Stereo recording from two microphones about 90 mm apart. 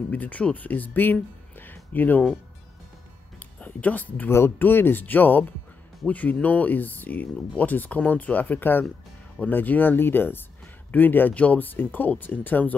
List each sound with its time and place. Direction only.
0.1 s speech: 15° left (ahead or behind)
3.5 s speech: 15° left (ahead or behind)